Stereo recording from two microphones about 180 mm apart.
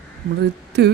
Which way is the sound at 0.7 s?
70° right (ahead or behind).